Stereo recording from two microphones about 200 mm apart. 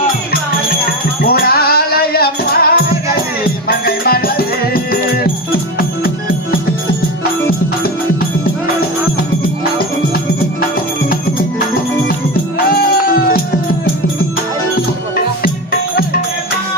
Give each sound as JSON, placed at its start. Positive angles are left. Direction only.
{"t": 1.2, "sound": "music", "side_deg": 50}
{"t": 12.6, "sound": "music", "side_deg": 45}